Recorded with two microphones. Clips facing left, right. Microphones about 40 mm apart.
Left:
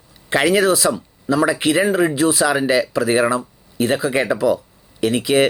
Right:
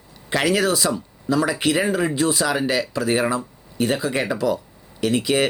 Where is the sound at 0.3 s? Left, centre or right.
Centre.